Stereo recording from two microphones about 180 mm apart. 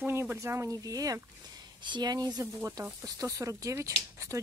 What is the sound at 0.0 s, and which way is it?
Speech, 10° right (ahead or behind).